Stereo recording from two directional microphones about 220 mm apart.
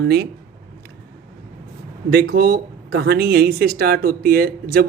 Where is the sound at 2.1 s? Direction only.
50° right (ahead or behind).